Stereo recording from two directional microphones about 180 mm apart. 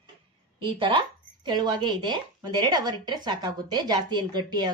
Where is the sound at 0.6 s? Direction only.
30° right (ahead or behind).